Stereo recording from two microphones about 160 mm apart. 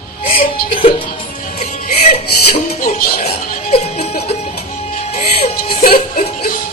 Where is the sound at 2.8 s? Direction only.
60° left (ahead or behind).